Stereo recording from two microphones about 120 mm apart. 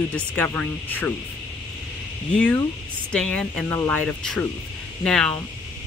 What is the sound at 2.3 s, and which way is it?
Speech, 10° left (ahead or behind).